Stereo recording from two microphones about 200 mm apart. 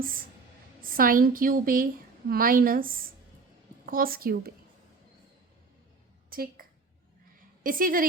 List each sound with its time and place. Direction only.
0.8 s a woman's voice: 45° right (ahead or behind)
6.3 s a sound: 45° right (ahead or behind)
7.6 s a woman's voice: 45° right (ahead or behind)